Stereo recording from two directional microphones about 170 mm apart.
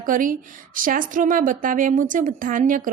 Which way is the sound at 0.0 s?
50° right (ahead or behind).